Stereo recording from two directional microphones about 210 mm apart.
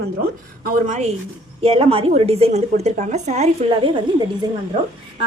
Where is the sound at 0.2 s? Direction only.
40° right (ahead or behind).